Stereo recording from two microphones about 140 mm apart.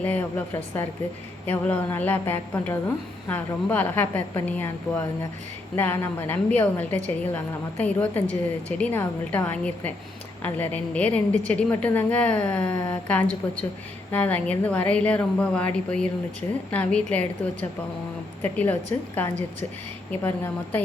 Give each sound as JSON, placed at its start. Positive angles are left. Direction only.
{"t": 0.0, "sound": "a woman's voice", "side_deg": 10}